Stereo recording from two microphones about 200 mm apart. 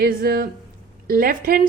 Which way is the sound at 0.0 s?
50° right (ahead or behind).